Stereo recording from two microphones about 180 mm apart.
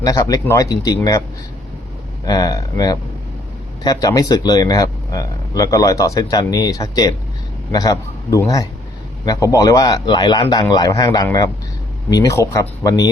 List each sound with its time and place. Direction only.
0.0 s speech: 20° left (ahead or behind)
2.2 s speech: 20° left (ahead or behind)